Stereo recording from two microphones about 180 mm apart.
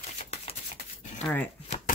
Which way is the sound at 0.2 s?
35° left (ahead or behind).